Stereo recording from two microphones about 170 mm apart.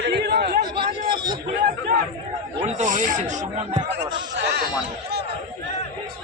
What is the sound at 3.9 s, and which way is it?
Speech, 90° right.